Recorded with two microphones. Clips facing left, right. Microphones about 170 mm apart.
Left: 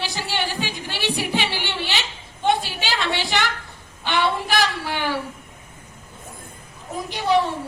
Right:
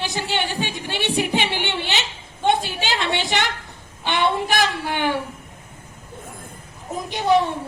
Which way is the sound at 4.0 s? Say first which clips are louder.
Right 1 dB; 20° right (ahead or behind).